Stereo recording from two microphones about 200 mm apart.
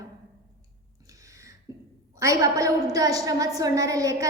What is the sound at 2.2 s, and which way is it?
A woman's voice, 15° right (ahead or behind).